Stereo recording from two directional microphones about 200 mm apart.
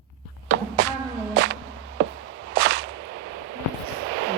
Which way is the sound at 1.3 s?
70° right (ahead or behind).